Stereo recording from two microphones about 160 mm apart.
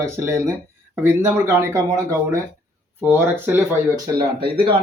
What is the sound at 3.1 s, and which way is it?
Speech, 15° right (ahead or behind).